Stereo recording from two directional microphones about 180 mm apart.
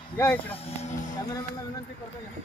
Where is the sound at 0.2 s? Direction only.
10° left (ahead or behind).